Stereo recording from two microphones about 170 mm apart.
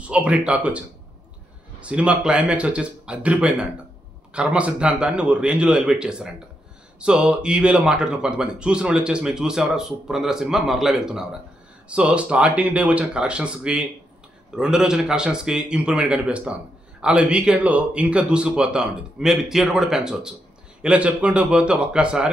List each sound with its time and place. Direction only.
0.0 s a man's voice: 5° right (ahead or behind)